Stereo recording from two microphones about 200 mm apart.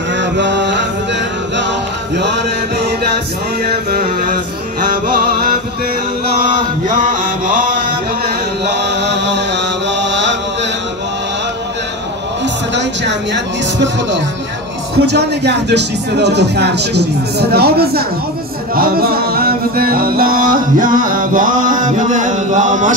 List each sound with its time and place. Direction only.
0.2 s music: 65° right (ahead or behind)
2.1 s speech: 60° right (ahead or behind)
3.6 s a sound: 45° right (ahead or behind)
6.4 s mantra: 40° right (ahead or behind)
8.6 s chant: 60° right (ahead or behind)
12.7 s music: 60° right (ahead or behind)
15.0 s speech: 55° right (ahead or behind)
18.8 s music: 50° right (ahead or behind)